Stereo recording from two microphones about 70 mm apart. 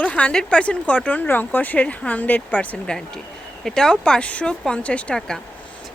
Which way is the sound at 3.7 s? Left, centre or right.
Centre.